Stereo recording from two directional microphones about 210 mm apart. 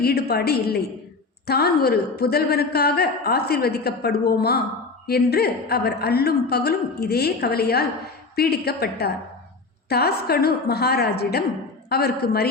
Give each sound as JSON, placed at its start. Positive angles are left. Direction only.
{"t": 0.0, "sound": "a woman's voice", "side_deg": 50}